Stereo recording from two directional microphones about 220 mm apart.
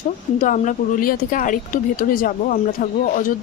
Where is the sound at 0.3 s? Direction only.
35° left (ahead or behind).